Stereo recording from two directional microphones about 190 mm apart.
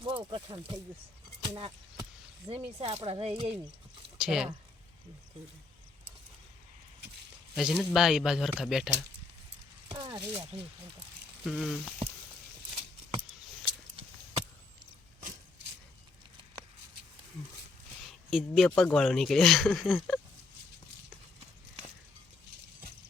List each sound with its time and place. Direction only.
0.0 s speech: 25° right (ahead or behind)
4.2 s speech: 5° right (ahead or behind)
7.5 s speech: 5° right (ahead or behind)
9.9 s speech: 25° right (ahead or behind)
11.4 s speech: centre (ahead or behind)
18.3 s speech: centre (ahead or behind)